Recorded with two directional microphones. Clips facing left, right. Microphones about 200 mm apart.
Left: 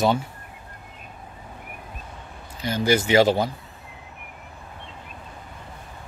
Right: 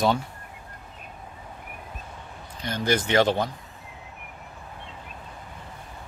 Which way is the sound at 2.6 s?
5° left (ahead or behind).